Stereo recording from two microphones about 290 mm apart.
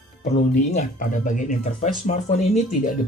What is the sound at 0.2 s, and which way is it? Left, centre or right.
Speech, left.